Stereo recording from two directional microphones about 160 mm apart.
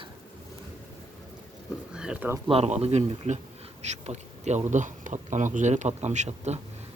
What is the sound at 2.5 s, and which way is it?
Speech, 40° right (ahead or behind).